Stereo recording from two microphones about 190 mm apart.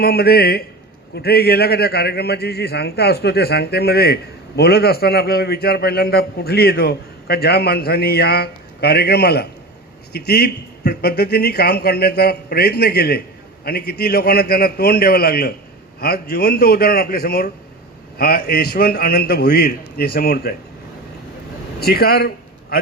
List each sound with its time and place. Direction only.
0.0 s a man's voice: 55° left (ahead or behind)
21.8 s a man's voice: 55° left (ahead or behind)